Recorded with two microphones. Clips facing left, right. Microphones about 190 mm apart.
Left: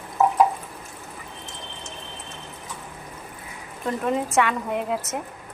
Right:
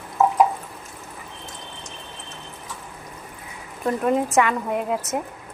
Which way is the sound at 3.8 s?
5° right (ahead or behind).